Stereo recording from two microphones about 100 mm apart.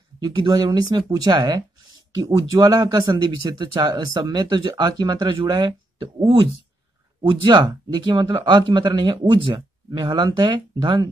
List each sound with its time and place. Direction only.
0.2 s speech: 40° right (ahead or behind)
7.2 s speech: 50° right (ahead or behind)